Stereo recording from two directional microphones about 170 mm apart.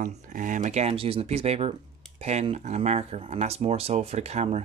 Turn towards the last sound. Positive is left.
turn(degrees=-40)  # may be behind; listen again after turning